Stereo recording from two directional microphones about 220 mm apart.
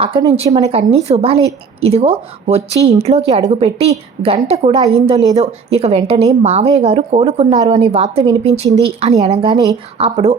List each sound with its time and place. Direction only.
0.0 s speech: 20° right (ahead or behind)
10.0 s speech: 25° right (ahead or behind)